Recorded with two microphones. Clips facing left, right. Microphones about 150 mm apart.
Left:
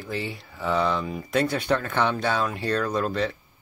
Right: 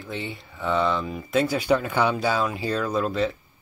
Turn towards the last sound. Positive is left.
turn(degrees=0)  # may be behind; listen again after turning